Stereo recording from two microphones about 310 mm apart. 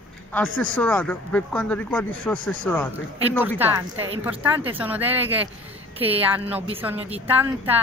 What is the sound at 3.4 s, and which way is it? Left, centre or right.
A woman's voice, centre.